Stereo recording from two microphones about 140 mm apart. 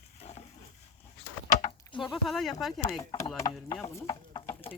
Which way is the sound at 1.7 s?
35° left (ahead or behind).